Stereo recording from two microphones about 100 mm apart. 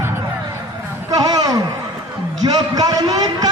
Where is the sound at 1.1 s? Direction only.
40° right (ahead or behind).